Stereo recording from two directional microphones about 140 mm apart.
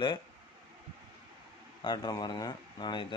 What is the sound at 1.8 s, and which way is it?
A man's voice, 30° left (ahead or behind).